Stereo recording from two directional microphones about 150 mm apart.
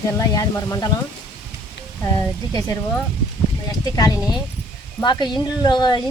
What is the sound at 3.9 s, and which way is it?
A woman's voice, 25° left (ahead or behind).